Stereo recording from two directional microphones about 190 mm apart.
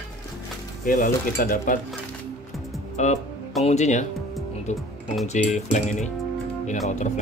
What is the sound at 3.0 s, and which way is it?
Speech, 40° left (ahead or behind).